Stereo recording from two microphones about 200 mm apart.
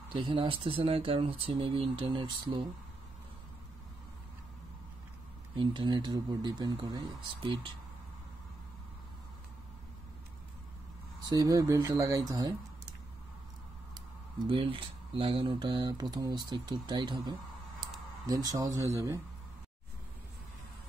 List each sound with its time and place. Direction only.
0.1 s speech: 25° right (ahead or behind)
5.6 s speech: 25° right (ahead or behind)
11.2 s speech: 20° right (ahead or behind)
14.5 s speech: 25° right (ahead or behind)